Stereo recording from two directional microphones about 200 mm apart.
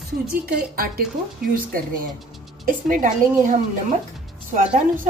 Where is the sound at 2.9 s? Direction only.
40° right (ahead or behind).